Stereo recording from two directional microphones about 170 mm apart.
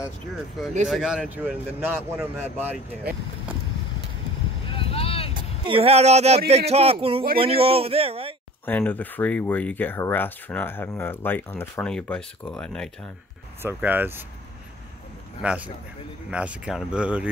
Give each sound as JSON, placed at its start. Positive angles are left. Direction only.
{"t": 0.8, "sound": "a man's voice", "side_deg": 0}
{"t": 4.6, "sound": "vehicle", "side_deg": 35}
{"t": 5.3, "sound": "a man's voice", "side_deg": -30}
{"t": 8.6, "sound": "speech", "side_deg": 10}
{"t": 13.6, "sound": "a man's voice", "side_deg": -10}
{"t": 15.4, "sound": "a man's voice", "side_deg": -5}